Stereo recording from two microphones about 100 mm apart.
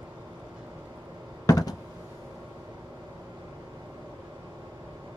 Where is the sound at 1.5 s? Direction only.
35° left (ahead or behind).